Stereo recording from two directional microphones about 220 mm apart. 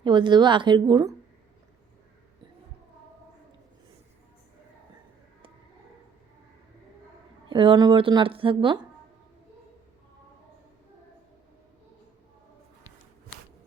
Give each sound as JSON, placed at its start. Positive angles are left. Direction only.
{"t": 0.0, "sound": "a woman's voice", "side_deg": -20}
{"t": 7.5, "sound": "a woman's voice", "side_deg": -20}